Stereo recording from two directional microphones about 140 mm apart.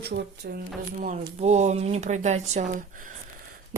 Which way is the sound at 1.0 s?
60° right (ahead or behind).